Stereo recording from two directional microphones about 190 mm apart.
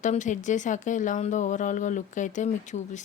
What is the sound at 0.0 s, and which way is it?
Speech, 40° left (ahead or behind).